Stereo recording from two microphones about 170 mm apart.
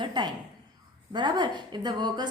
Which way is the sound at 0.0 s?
25° right (ahead or behind).